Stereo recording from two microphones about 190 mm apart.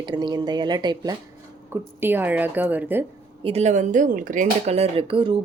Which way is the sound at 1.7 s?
10° right (ahead or behind).